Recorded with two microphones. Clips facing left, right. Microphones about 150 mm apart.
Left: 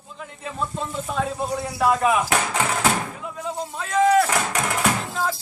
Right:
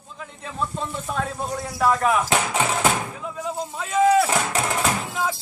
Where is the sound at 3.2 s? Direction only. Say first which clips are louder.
Right 1 dB; centre (ahead or behind).